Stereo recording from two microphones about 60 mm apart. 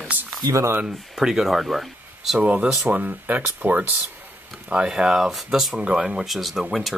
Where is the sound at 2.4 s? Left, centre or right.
Centre.